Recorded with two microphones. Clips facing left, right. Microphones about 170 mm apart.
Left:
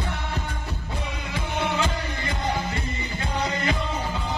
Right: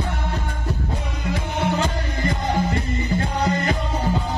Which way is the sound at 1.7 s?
45° right (ahead or behind).